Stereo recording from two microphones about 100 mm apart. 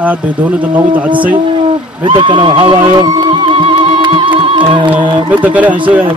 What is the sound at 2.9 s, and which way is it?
Music, 40° right (ahead or behind).